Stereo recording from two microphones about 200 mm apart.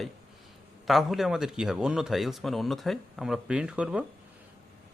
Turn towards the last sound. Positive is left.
turn(degrees=-5)  # may be behind; listen again after turning